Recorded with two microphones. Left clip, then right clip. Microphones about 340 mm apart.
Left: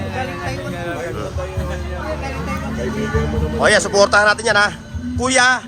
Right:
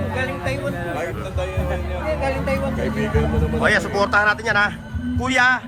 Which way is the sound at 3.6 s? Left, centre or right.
Centre.